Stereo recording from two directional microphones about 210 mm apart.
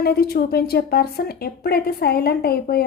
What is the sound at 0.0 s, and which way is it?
A woman's voice, 45° left (ahead or behind).